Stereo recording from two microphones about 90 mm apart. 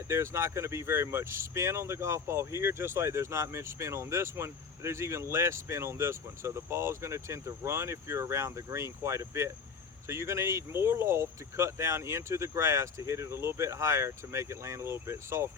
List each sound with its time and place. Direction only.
0.1 s speech: 30° right (ahead or behind)